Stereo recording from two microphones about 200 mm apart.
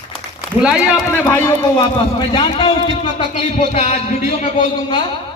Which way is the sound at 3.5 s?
35° left (ahead or behind).